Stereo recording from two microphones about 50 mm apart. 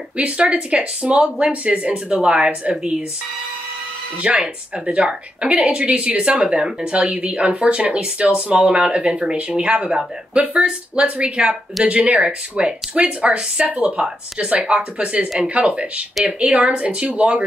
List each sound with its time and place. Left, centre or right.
0.2 s speech: right
4.2 s speech: right